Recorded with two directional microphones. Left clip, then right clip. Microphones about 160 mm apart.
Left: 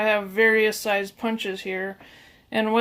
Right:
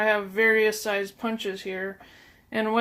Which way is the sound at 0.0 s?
45° left (ahead or behind).